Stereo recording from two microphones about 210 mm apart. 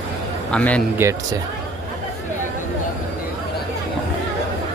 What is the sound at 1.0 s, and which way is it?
Speech, 10° right (ahead or behind).